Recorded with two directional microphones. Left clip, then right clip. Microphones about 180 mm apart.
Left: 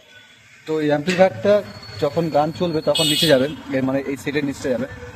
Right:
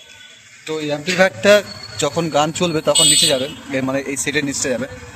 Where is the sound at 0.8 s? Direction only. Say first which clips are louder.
Left 4 dB; 45° left (ahead or behind).